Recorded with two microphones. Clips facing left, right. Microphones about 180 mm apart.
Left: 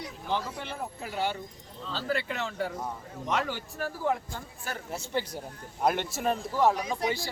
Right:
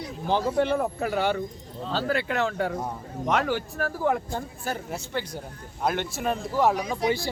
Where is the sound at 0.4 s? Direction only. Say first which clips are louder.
Right 13 dB; 65° right (ahead or behind).